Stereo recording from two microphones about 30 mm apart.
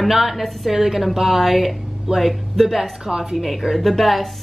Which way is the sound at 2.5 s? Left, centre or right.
Centre.